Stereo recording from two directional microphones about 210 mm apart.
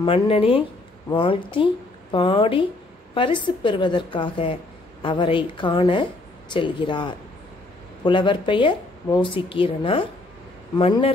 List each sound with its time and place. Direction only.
0.0 s speech: 25° left (ahead or behind)